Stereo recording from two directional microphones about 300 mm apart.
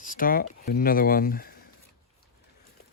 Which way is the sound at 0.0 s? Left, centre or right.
Left.